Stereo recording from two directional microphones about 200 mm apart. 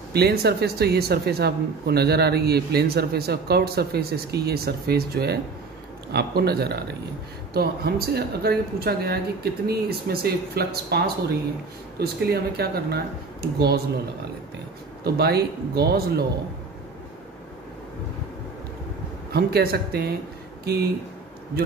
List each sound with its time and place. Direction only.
0.1 s speech: 50° right (ahead or behind)
15.0 s speech: 55° right (ahead or behind)
19.3 s speech: 50° right (ahead or behind)